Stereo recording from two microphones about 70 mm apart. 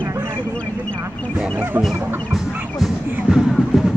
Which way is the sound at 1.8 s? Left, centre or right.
Centre.